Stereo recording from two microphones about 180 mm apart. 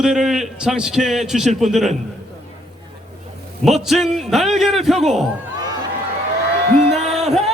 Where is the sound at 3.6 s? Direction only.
Centre (ahead or behind).